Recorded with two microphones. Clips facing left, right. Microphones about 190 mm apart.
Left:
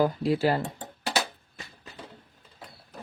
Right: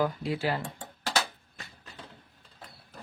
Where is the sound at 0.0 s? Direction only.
40° left (ahead or behind).